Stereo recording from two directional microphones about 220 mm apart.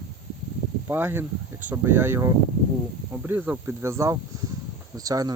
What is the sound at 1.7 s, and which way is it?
Cricket, 10° right (ahead or behind).